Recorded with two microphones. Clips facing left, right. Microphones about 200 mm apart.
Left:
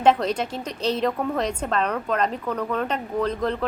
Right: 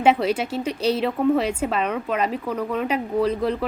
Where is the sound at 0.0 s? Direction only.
5° right (ahead or behind).